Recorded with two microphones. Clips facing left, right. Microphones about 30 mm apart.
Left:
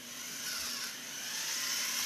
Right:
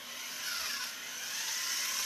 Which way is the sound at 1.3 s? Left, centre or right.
Centre.